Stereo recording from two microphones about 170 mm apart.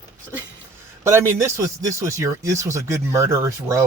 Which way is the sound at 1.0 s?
15° right (ahead or behind).